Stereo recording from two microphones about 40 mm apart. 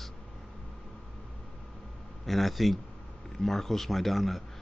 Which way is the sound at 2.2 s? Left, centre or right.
Centre.